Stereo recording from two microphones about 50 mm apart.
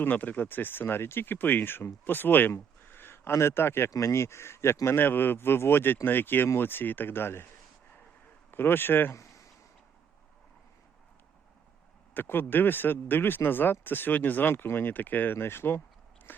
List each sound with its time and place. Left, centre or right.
0.0 s speech: left
2.5 s a sound: left
3.8 s speech: left
8.4 s speech: left
9.1 s a sound: left
12.1 s speech: left
14.5 s speech: left